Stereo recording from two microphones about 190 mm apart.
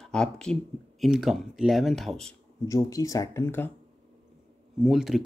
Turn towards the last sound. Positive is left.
turn(degrees=0)  # may be behind; listen again after turning